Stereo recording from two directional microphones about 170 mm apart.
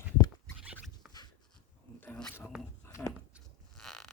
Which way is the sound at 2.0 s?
5° left (ahead or behind).